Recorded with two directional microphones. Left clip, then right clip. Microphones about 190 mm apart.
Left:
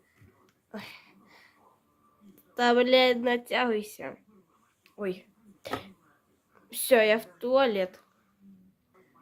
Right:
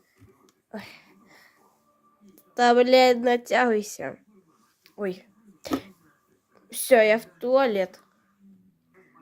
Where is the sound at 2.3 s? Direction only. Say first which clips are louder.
Right 5 dB; 15° right (ahead or behind).